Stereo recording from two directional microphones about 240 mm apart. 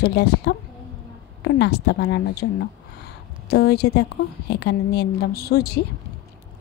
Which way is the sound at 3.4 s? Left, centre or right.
Left.